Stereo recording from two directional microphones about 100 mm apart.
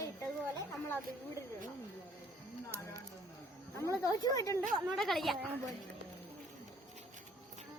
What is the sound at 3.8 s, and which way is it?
Speech, 35° left (ahead or behind).